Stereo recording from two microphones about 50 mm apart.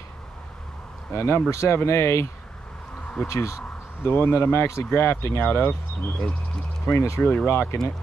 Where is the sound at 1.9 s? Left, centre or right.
Left.